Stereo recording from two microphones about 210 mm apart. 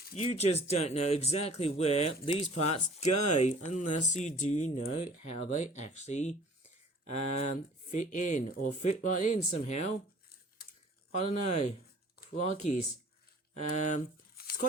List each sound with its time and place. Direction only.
0.2 s speech: 30° left (ahead or behind)
11.1 s speech: 35° left (ahead or behind)
13.5 s a sound: 35° left (ahead or behind)